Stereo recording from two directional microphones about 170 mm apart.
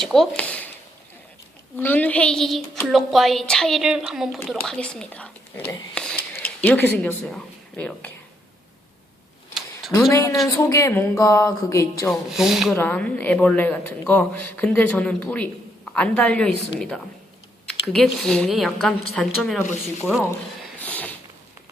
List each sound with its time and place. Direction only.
0.0 s speech: centre (ahead or behind)
1.7 s a woman's voice: 10° left (ahead or behind)
10.1 s speech: 15° left (ahead or behind)
12.4 s a woman's voice: centre (ahead or behind)
12.7 s a woman's voice: 10° left (ahead or behind)
20.8 s a sound: 10° left (ahead or behind)